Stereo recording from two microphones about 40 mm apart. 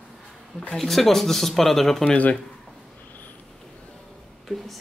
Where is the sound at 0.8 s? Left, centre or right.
Centre.